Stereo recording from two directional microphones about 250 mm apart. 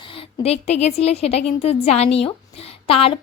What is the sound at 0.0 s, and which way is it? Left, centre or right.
A woman's voice, left.